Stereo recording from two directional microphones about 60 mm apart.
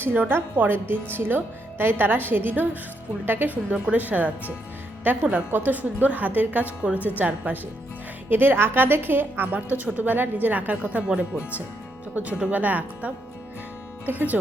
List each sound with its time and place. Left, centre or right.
0.0 s a woman's voice: right